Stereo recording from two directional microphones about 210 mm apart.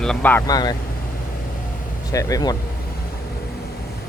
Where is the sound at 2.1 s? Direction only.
15° left (ahead or behind).